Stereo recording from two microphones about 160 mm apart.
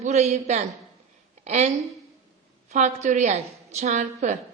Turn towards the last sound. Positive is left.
turn(degrees=-50)  # may be behind; listen again after turning